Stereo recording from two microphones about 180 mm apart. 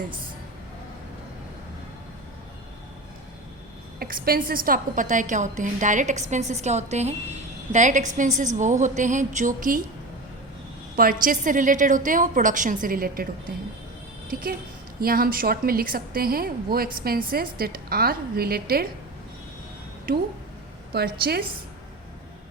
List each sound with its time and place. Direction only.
4.0 s a woman's voice: 55° right (ahead or behind)
10.9 s a woman's voice: 50° right (ahead or behind)
15.0 s a woman's voice: 55° right (ahead or behind)
20.1 s a woman's voice: 55° right (ahead or behind)